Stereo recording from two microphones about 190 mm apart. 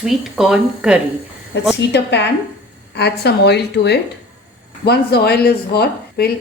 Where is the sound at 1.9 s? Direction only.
60° left (ahead or behind).